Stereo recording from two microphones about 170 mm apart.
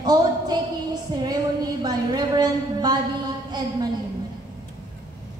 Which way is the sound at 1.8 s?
25° right (ahead or behind).